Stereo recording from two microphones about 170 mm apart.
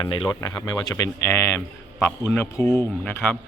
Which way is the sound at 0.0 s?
25° left (ahead or behind).